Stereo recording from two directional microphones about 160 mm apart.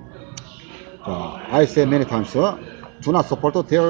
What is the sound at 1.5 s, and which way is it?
A man's voice, 5° left (ahead or behind).